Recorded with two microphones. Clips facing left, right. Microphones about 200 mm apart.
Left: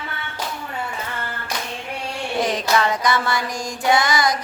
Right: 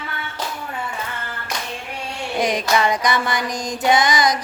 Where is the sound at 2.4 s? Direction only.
15° right (ahead or behind).